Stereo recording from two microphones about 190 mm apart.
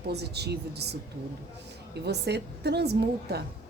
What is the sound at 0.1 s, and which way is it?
Speech, 60° right (ahead or behind).